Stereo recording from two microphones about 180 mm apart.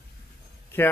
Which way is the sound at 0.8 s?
10° left (ahead or behind).